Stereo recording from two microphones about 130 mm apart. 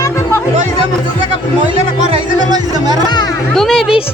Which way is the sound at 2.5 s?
30° right (ahead or behind).